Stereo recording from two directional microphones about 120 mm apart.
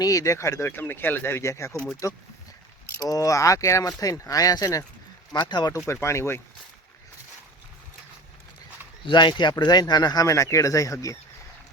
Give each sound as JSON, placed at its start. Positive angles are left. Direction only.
{"t": 0.0, "sound": "speech", "side_deg": 30}
{"t": 5.9, "sound": "speech", "side_deg": 25}
{"t": 9.0, "sound": "speech", "side_deg": 40}